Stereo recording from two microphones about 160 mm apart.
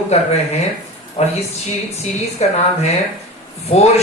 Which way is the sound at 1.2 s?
35° left (ahead or behind).